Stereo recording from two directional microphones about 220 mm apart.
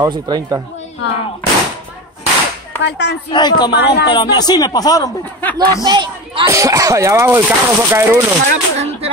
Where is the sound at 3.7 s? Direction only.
50° left (ahead or behind).